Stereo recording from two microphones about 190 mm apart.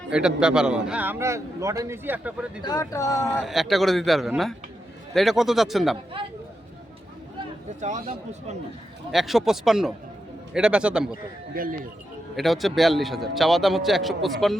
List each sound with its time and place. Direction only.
0.1 s a man's voice: 5° right (ahead or behind)
2.6 s speech: 20° left (ahead or behind)
3.4 s a man's voice: centre (ahead or behind)
7.8 s speech: 40° right (ahead or behind)
9.1 s a man's voice: centre (ahead or behind)
11.5 s speech: 50° right (ahead or behind)
12.4 s a man's voice: centre (ahead or behind)